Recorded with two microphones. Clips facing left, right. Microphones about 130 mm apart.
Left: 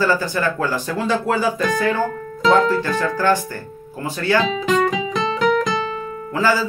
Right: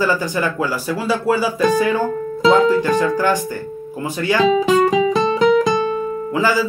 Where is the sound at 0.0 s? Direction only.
15° right (ahead or behind).